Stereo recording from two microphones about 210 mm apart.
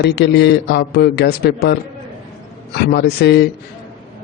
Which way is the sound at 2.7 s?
50° left (ahead or behind).